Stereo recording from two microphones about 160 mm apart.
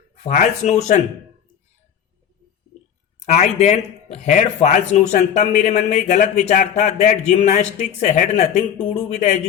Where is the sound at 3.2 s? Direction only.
45° left (ahead or behind).